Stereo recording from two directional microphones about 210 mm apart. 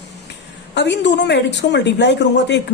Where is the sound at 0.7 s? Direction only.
55° left (ahead or behind).